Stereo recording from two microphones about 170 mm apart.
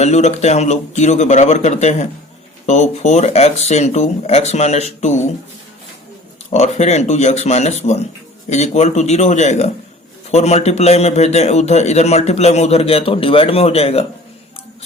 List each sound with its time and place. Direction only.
0.0 s a man's voice: 40° left (ahead or behind)
6.5 s a man's voice: 40° left (ahead or behind)